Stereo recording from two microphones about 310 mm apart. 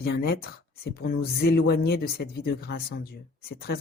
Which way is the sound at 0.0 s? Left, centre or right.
Left.